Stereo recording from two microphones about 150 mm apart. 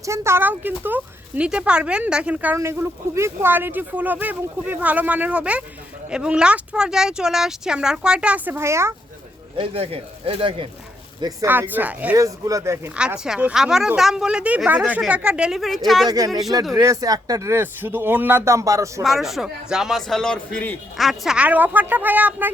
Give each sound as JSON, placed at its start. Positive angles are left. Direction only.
{"t": 0.0, "sound": "speech", "side_deg": -20}
{"t": 9.6, "sound": "speech", "side_deg": -40}
{"t": 11.2, "sound": "speech", "side_deg": -25}
{"t": 11.4, "sound": "speech", "side_deg": -10}
{"t": 12.1, "sound": "speech", "side_deg": -20}
{"t": 13.0, "sound": "speech", "side_deg": -5}
{"t": 16.0, "sound": "speech", "side_deg": -25}
{"t": 19.0, "sound": "speech", "side_deg": 0}